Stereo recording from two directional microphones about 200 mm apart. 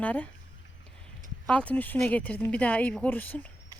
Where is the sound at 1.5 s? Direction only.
5° left (ahead or behind).